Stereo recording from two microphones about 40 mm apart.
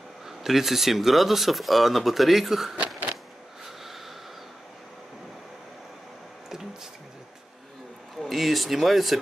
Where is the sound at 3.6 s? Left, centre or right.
Centre.